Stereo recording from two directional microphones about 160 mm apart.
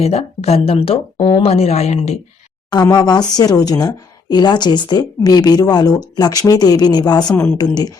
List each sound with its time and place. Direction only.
0.0 s speech: 40° left (ahead or behind)
2.6 s speech: 25° left (ahead or behind)